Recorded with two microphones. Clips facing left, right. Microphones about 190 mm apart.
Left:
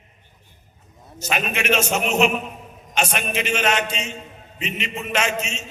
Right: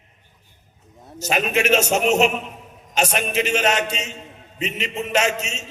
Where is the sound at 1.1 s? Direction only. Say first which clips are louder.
Right 4 dB; 40° right (ahead or behind).